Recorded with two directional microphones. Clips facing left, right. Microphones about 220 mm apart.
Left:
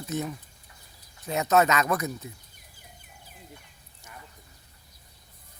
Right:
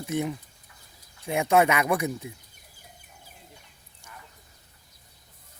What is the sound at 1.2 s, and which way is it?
Speech, 10° right (ahead or behind).